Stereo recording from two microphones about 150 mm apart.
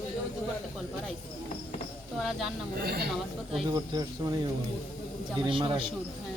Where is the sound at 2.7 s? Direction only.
90° right.